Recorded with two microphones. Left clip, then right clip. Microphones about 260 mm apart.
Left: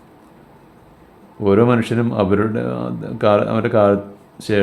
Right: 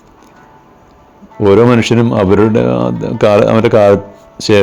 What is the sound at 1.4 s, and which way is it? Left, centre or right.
Speech, right.